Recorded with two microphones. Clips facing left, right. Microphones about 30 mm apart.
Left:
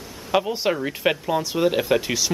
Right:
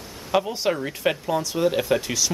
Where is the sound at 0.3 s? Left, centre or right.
Centre.